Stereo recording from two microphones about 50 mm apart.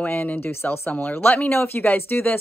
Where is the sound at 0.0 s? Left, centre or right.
Left.